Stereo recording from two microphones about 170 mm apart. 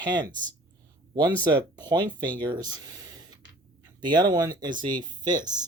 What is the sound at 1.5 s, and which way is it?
Speech, 25° right (ahead or behind).